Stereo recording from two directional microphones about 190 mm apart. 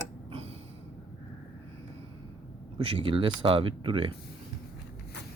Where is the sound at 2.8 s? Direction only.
30° right (ahead or behind).